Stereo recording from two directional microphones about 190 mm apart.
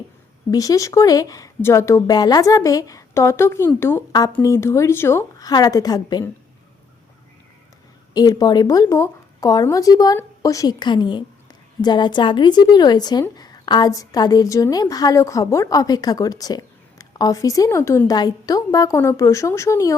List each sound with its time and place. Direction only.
0.5 s a woman's voice: 20° left (ahead or behind)
8.1 s a woman's voice: 20° left (ahead or behind)